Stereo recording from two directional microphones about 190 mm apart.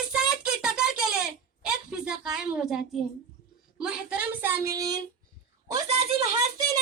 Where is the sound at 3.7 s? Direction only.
5° right (ahead or behind).